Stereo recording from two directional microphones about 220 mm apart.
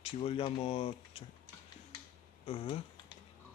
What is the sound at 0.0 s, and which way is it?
Speech, 25° left (ahead or behind).